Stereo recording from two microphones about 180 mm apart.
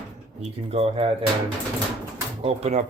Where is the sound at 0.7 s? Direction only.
35° right (ahead or behind).